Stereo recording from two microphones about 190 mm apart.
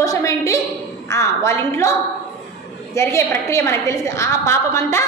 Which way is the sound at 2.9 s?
15° left (ahead or behind).